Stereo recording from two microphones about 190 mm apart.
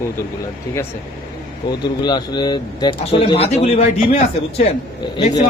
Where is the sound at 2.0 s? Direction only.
20° left (ahead or behind).